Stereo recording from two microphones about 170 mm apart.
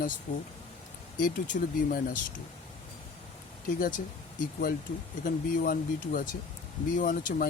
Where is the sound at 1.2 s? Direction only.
55° left (ahead or behind).